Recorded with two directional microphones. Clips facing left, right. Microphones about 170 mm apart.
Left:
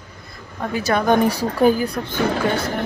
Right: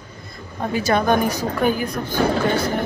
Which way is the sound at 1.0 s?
25° left (ahead or behind).